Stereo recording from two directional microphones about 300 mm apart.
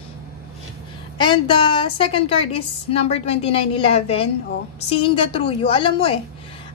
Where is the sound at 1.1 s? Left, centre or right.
Centre.